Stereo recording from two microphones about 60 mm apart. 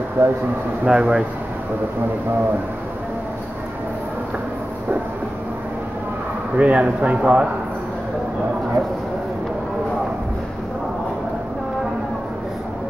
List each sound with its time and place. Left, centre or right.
0.2 s speech: right
0.8 s speech: centre
6.5 s speech: right